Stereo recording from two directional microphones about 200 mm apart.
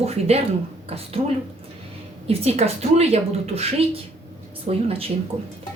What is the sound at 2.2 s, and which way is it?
A woman's voice, 30° right (ahead or behind).